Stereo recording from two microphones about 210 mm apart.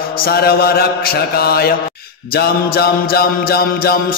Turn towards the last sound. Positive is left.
turn(degrees=45)  # may be behind; listen again after turning